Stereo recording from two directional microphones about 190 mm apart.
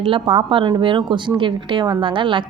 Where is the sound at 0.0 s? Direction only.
30° right (ahead or behind).